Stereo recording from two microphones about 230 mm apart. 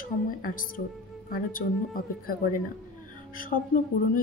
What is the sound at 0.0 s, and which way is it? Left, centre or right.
Speech, left.